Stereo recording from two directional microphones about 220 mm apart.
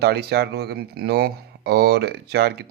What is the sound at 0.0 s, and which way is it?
Speech, 45° right (ahead or behind).